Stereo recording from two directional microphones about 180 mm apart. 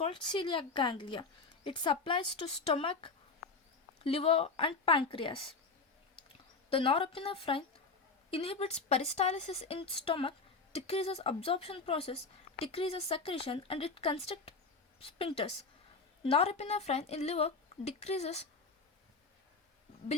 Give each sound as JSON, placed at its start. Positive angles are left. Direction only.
{"t": 0.0, "sound": "a woman's voice", "side_deg": 25}
{"t": 6.7, "sound": "a woman's voice", "side_deg": 30}